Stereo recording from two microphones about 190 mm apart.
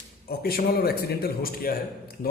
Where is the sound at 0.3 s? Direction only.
55° left (ahead or behind).